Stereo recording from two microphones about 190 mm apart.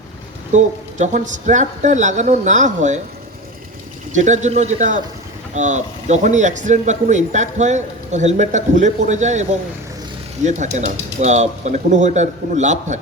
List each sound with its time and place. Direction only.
0.5 s speech: 40° right (ahead or behind)
4.1 s speech: 40° right (ahead or behind)